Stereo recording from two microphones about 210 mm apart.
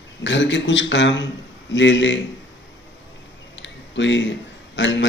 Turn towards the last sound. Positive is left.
turn(degrees=60)  # may be behind; listen again after turning